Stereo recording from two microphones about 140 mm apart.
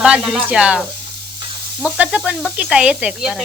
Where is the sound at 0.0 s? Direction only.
5° right (ahead or behind).